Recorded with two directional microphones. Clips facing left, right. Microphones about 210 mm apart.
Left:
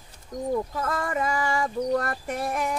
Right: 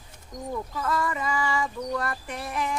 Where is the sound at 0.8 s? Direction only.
50° left (ahead or behind).